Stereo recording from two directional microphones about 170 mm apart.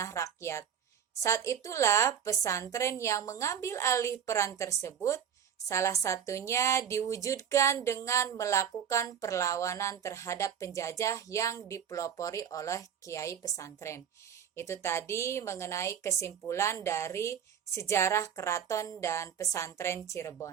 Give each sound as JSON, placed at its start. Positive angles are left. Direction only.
{"t": 0.0, "sound": "a woman's voice", "side_deg": 20}